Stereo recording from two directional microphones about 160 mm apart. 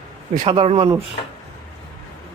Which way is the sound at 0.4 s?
40° right (ahead or behind).